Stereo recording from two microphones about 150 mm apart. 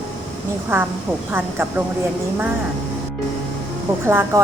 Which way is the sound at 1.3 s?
15° right (ahead or behind).